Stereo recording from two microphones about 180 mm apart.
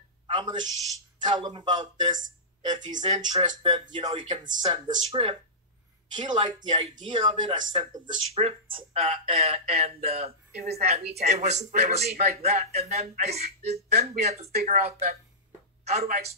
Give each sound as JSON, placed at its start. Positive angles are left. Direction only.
{"t": 0.4, "sound": "a man's voice", "side_deg": -25}
{"t": 16.0, "sound": "a woman's voice", "side_deg": -55}